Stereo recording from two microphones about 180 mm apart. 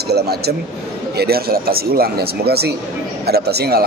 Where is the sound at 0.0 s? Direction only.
65° right (ahead or behind).